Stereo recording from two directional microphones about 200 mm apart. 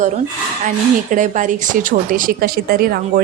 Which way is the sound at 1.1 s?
40° right (ahead or behind).